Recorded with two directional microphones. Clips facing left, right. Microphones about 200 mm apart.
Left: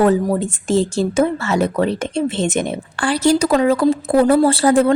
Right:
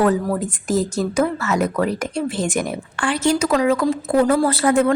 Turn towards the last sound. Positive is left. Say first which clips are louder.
# left 3 dB
turn(degrees=35)  # may be behind; listen again after turning